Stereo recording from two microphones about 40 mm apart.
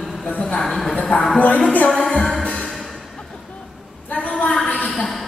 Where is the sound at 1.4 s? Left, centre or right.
Left.